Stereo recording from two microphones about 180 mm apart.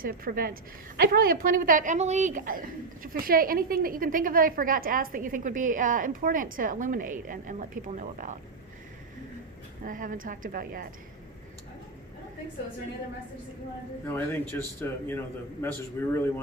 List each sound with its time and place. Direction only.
0.0 s a woman's voice: 55° right (ahead or behind)
9.8 s a woman's voice: 50° right (ahead or behind)
14.1 s speech: 10° left (ahead or behind)